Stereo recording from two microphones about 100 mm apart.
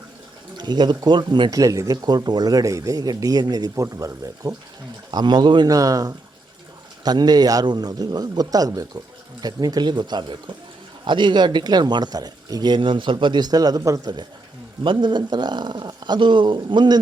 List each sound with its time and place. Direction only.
0.5 s speech: 45° right (ahead or behind)
1.5 s speech: 35° right (ahead or behind)
5.1 s speech: 45° right (ahead or behind)
14.8 s speech: 50° right (ahead or behind)